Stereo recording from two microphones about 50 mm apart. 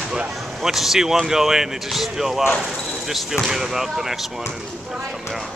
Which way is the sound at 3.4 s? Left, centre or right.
Centre.